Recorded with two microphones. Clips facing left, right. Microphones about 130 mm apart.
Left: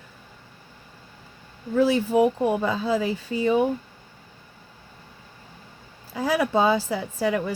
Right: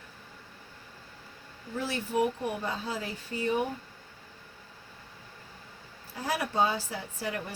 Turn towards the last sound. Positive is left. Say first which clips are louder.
# left 11 dB
turn(degrees=90)